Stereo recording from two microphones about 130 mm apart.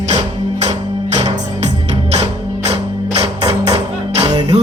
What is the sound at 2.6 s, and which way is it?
Music, 55° right (ahead or behind).